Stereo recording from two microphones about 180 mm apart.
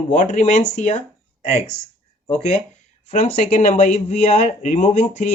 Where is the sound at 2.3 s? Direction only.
40° left (ahead or behind).